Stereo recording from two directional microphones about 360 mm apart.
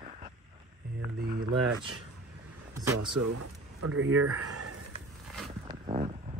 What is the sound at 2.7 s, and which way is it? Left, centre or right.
Speech, centre.